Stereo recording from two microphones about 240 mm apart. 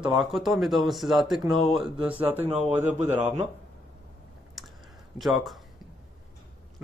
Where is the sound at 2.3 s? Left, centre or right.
Right.